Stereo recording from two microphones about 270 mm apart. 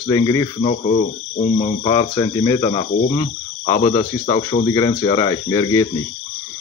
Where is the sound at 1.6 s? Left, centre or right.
Centre.